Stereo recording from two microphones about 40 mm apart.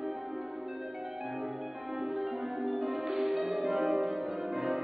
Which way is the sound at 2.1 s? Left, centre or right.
Centre.